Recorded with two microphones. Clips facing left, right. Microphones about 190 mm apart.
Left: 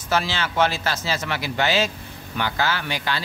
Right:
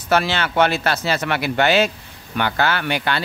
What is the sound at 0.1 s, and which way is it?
A man's voice, 65° right (ahead or behind).